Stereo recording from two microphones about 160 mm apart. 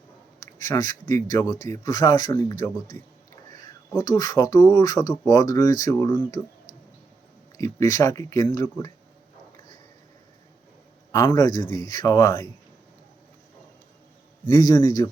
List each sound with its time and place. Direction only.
0.6 s speech: 20° left (ahead or behind)
7.5 s speech: 20° left (ahead or behind)
11.1 s a man's voice: 15° left (ahead or behind)
11.6 s speech: 25° right (ahead or behind)
11.9 s speech: 20° left (ahead or behind)
14.4 s speech: 20° left (ahead or behind)